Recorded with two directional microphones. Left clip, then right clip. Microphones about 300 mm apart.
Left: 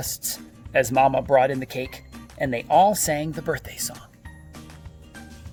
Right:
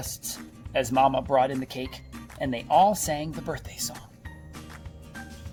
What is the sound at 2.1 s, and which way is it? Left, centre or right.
Music, centre.